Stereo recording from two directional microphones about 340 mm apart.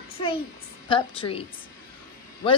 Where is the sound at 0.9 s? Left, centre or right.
Centre.